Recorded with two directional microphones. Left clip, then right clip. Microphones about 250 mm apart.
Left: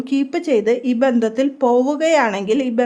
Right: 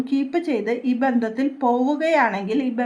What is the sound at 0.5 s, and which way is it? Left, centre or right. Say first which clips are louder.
Speech: left 7 dB; left.